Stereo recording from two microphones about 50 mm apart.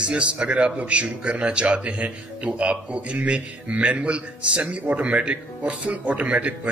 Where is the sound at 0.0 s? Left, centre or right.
Right.